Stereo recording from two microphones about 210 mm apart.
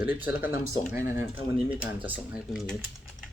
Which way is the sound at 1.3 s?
5° right (ahead or behind).